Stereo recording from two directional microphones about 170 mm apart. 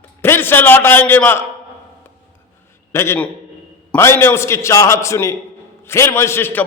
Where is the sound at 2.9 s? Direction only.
15° left (ahead or behind).